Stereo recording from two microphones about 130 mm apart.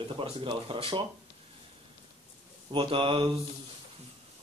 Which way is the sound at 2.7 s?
45° right (ahead or behind).